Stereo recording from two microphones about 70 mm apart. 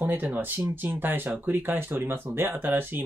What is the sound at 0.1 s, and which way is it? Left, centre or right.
Speech, right.